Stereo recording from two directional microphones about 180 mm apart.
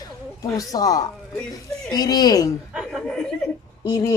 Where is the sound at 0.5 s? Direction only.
20° left (ahead or behind).